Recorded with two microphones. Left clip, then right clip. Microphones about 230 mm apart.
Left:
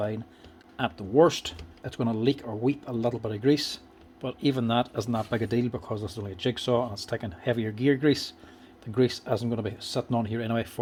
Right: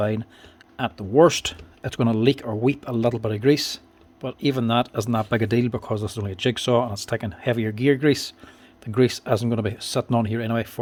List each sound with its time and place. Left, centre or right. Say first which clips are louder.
0.8 s speech: right 5 dB; right